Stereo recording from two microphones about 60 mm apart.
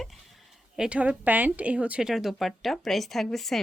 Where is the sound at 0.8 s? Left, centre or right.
Right.